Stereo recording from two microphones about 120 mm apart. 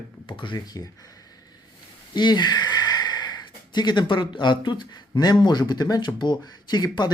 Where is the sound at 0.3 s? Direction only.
45° left (ahead or behind).